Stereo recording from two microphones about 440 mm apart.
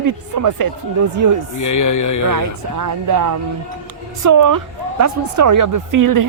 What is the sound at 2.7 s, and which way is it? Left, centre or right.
A woman's voice, right.